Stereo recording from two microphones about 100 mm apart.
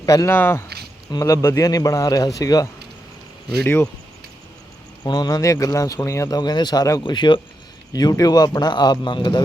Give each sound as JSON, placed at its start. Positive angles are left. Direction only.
{"t": 0.0, "sound": "speech", "side_deg": 35}
{"t": 0.3, "sound": "speech", "side_deg": 25}
{"t": 5.0, "sound": "speech", "side_deg": 45}
{"t": 7.0, "sound": "a man's voice", "side_deg": 50}
{"t": 7.9, "sound": "a man's voice", "side_deg": 40}